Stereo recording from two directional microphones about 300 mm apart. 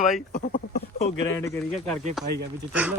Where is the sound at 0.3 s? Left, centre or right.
Left.